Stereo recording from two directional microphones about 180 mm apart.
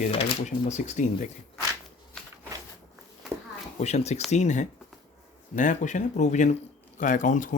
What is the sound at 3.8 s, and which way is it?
Speech, 40° left (ahead or behind).